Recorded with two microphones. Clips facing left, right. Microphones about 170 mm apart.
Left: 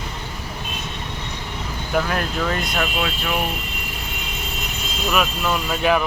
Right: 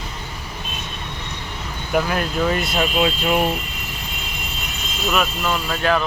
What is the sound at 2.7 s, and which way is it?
Speech, 20° right (ahead or behind).